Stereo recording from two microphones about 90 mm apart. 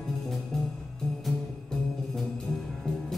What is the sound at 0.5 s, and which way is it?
Music, 5° left (ahead or behind).